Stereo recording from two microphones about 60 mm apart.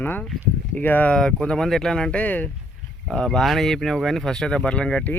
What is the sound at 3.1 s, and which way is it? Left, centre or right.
Speech, centre.